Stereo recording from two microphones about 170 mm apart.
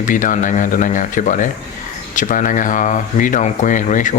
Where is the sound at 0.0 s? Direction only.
50° left (ahead or behind).